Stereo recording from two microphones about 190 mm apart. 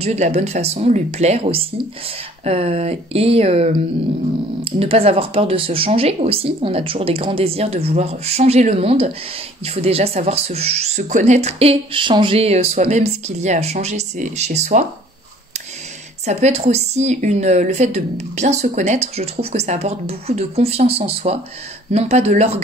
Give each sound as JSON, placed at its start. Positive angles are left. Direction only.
{"t": 0.0, "sound": "speech", "side_deg": -35}
{"t": 16.3, "sound": "speech", "side_deg": -35}